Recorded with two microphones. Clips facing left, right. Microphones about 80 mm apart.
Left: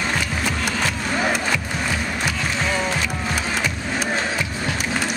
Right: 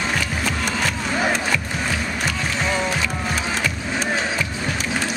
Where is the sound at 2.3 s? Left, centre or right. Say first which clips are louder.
Right 1 dB; centre.